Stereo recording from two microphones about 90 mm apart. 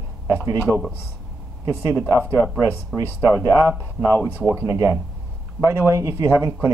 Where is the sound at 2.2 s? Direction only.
20° right (ahead or behind).